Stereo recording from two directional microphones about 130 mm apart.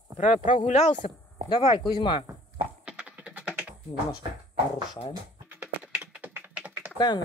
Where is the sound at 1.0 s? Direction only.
40° left (ahead or behind).